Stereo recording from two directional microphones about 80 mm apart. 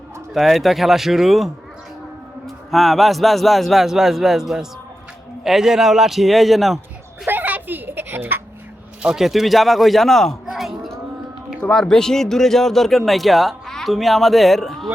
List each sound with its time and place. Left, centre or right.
0.3 s speech: centre
2.7 s speech: centre
7.3 s children playing: right
9.0 s speech: centre
10.4 s a sound: centre
11.7 s speech: centre